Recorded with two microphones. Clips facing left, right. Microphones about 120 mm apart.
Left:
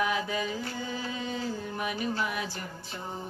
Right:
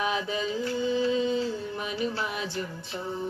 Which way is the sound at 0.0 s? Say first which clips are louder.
Right 1 dB; 20° right (ahead or behind).